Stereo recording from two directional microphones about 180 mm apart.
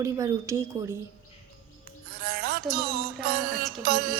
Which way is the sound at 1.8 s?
60° right (ahead or behind).